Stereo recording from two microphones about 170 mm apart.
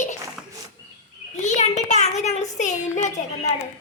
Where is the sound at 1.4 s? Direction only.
40° left (ahead or behind).